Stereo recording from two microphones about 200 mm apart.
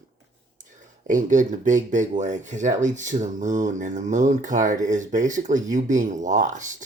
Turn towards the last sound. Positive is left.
turn(degrees=-40)  # may be behind; listen again after turning